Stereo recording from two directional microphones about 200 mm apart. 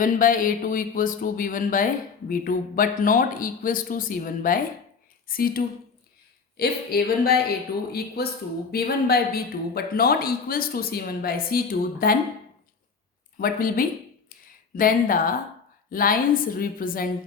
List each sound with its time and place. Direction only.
0.0 s speech: 45° left (ahead or behind)
13.4 s speech: 45° left (ahead or behind)